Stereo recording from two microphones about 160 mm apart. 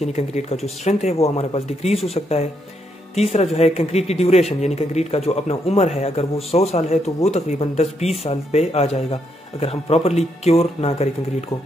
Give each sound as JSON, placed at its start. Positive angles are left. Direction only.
{"t": 0.0, "sound": "a man's voice", "side_deg": 45}